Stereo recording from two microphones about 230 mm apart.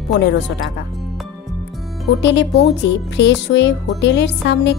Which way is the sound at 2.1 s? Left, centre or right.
Left.